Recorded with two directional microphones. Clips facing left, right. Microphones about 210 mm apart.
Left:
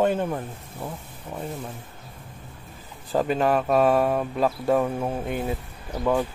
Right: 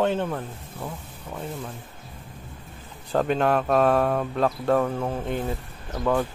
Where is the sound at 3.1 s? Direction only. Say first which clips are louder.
Even; 5° left (ahead or behind).